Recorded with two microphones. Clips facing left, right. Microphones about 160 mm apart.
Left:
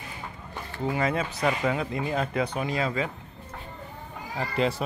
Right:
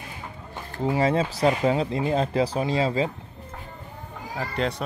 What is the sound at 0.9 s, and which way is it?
Speech, 30° right (ahead or behind).